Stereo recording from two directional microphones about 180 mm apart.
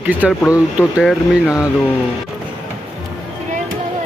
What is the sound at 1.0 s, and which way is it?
Speech, centre (ahead or behind).